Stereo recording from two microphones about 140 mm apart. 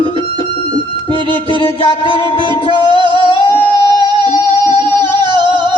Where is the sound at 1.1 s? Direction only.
40° left (ahead or behind).